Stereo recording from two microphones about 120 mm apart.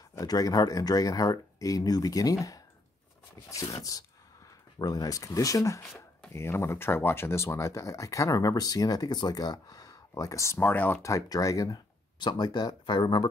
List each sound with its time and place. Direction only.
0.1 s speech: 30° left (ahead or behind)
4.7 s speech: 30° left (ahead or behind)